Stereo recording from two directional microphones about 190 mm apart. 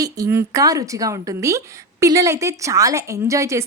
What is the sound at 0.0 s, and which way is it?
A woman's voice, 15° right (ahead or behind).